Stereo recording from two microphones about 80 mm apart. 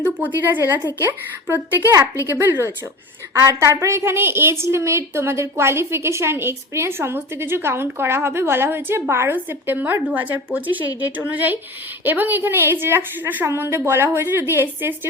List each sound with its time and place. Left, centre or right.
0.0 s a woman's voice: right
9.3 s a woman's voice: right